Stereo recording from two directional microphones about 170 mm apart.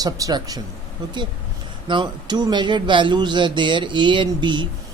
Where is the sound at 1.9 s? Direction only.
25° right (ahead or behind).